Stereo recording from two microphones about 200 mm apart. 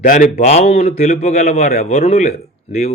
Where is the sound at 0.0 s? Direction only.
40° left (ahead or behind).